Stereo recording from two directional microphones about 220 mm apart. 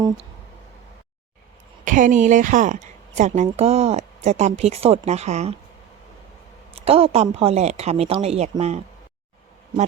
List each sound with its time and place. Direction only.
1.8 s a woman's voice: 35° right (ahead or behind)
6.7 s speech: 25° right (ahead or behind)